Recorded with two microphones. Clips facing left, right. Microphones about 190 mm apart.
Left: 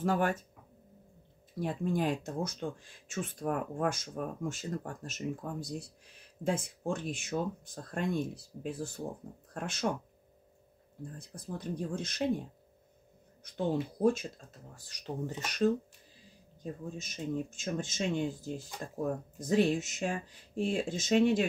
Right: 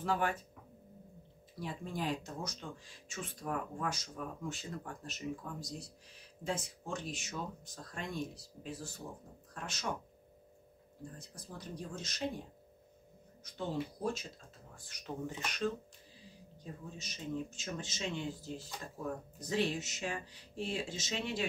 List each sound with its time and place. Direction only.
0.0 s speech: 45° left (ahead or behind)
1.6 s speech: 50° left (ahead or behind)
11.1 s speech: 55° left (ahead or behind)
13.4 s speech: 55° left (ahead or behind)
14.9 s speech: 35° left (ahead or behind)
17.0 s speech: 50° left (ahead or behind)